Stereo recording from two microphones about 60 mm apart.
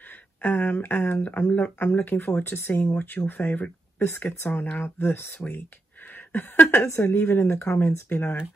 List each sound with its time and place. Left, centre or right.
0.4 s speech: left
4.0 s speech: left
7.7 s speech: left
8.1 s speech: left